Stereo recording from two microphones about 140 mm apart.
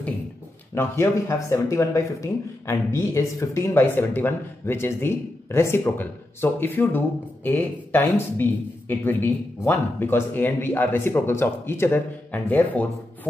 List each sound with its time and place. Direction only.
0.7 s speech: 20° left (ahead or behind)